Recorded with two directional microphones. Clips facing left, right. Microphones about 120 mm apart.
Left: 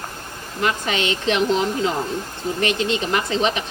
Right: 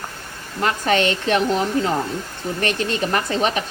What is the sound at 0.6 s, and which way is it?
Speech, 45° right (ahead or behind).